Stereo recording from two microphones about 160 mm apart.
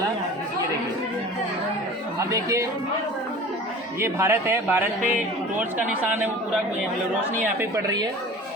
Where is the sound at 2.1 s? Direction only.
20° right (ahead or behind).